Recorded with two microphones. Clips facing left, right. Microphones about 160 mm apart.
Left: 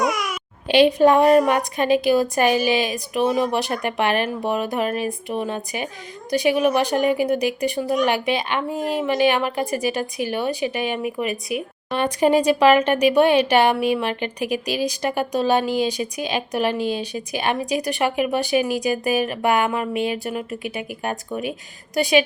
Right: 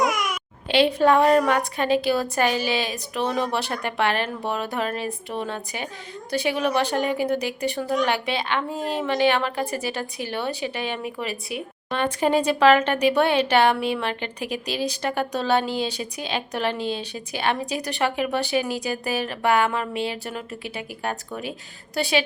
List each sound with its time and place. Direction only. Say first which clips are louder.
0.0 s babbling: left 1 dB; centre (ahead or behind)
0.7 s speech: left 4 dB; 15° left (ahead or behind)
11.3 s speech: left 5 dB; 30° right (ahead or behind)
11.9 s speech: left 4 dB; 15° left (ahead or behind)